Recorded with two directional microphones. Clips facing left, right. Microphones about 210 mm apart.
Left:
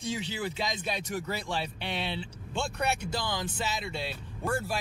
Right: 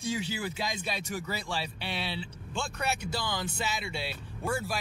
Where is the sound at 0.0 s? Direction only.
10° right (ahead or behind).